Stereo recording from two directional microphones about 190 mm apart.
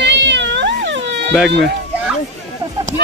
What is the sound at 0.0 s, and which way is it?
Cat, 65° right (ahead or behind).